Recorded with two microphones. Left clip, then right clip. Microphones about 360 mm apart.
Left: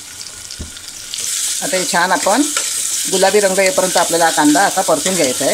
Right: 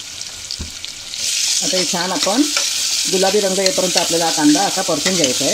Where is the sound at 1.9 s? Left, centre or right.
Left.